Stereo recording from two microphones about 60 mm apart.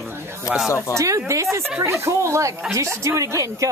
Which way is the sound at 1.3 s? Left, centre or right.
Right.